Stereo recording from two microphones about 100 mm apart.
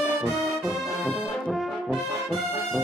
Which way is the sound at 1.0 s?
Centre (ahead or behind).